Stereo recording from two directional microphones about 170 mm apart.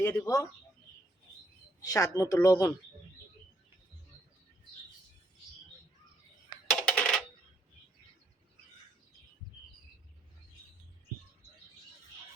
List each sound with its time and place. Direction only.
0.0 s speech: 15° left (ahead or behind)
1.8 s speech: 20° left (ahead or behind)
6.8 s coin: 5° left (ahead or behind)